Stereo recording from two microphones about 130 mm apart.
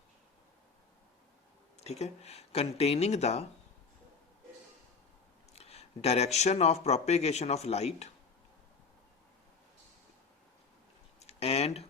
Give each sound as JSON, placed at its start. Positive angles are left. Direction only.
{"t": 1.8, "sound": "speech", "side_deg": 55}
{"t": 5.5, "sound": "speech", "side_deg": 50}
{"t": 11.2, "sound": "speech", "side_deg": 50}